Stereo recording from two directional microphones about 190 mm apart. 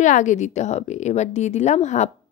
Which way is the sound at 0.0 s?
40° left (ahead or behind).